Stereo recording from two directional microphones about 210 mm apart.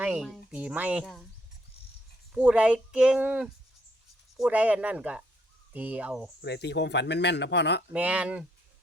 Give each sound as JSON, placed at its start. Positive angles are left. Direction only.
{"t": 0.0, "sound": "speech", "side_deg": -5}
{"t": 2.3, "sound": "speech", "side_deg": -5}
{"t": 6.4, "sound": "speech", "side_deg": 55}
{"t": 7.9, "sound": "speech", "side_deg": -5}